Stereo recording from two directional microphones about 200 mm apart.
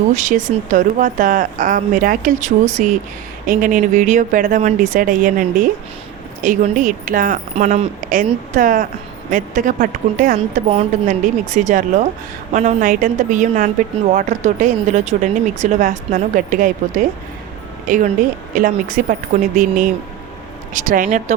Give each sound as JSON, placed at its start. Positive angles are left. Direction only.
{"t": 0.1, "sound": "speech", "side_deg": -40}